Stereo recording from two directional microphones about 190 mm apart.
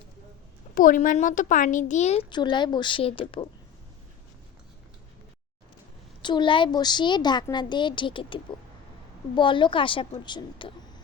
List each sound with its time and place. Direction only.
0.7 s a woman's voice: 45° left (ahead or behind); by 3.5 s 30° left (ahead or behind)
6.2 s a woman's voice: 25° left (ahead or behind)